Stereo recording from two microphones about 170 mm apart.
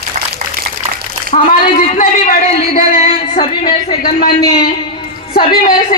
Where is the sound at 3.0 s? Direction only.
35° left (ahead or behind).